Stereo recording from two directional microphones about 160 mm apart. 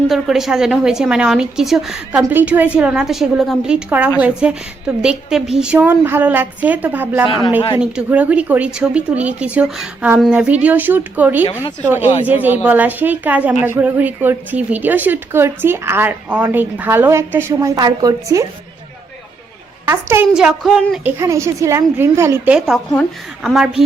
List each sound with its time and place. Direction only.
0.1 s a woman's voice: centre (ahead or behind)
3.8 s a woman's voice: 10° right (ahead or behind)
7.3 s speech: 30° left (ahead or behind)
7.8 s a woman's voice: 5° right (ahead or behind); by 18.4 s 20° right (ahead or behind)
19.9 s a woman's voice: 15° right (ahead or behind)
20.3 s a woman's voice: centre (ahead or behind)
21.2 s a woman's voice: 20° right (ahead or behind)
22.5 s a woman's voice: centre (ahead or behind)